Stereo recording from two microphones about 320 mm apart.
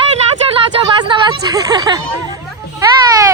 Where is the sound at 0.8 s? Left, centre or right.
Centre.